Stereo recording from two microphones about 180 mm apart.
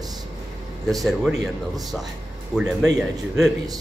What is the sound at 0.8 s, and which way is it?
Speech, centre (ahead or behind).